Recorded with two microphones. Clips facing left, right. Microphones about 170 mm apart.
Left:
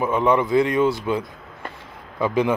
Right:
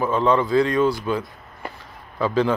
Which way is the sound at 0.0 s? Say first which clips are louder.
Even; 15° left (ahead or behind).